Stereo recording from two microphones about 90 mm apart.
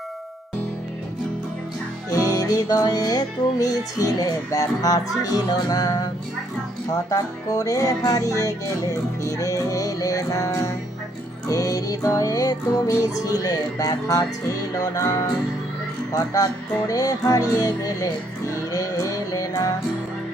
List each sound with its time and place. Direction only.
2.3 s music: 45° left (ahead or behind)